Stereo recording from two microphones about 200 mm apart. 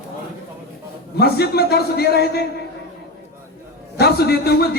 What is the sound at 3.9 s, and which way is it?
Speech, 55° left (ahead or behind).